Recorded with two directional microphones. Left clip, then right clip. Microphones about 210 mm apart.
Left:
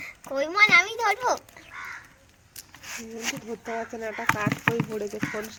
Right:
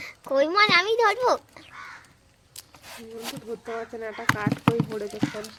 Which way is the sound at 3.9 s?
15° left (ahead or behind).